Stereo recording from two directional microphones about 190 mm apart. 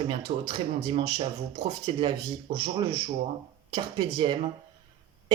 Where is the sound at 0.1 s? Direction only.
20° right (ahead or behind).